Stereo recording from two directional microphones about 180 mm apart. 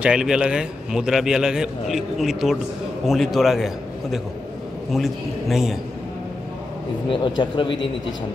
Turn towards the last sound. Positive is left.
turn(degrees=25)  # may be behind; listen again after turning